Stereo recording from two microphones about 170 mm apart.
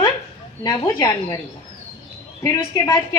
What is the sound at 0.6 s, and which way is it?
Speech, 20° left (ahead or behind).